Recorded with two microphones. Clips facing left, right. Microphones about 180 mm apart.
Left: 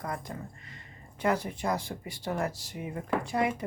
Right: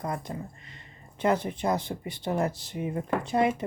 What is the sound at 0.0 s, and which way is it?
Speech, 20° right (ahead or behind).